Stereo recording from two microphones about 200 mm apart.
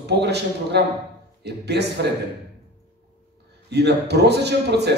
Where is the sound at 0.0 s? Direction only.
55° right (ahead or behind).